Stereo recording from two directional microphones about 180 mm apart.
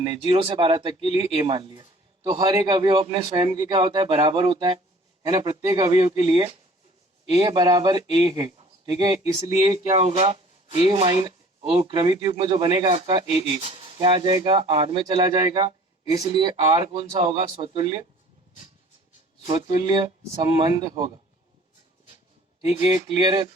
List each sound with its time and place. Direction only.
0.0 s speech: 30° right (ahead or behind)
19.5 s speech: 25° right (ahead or behind)
22.8 s speech: 25° right (ahead or behind)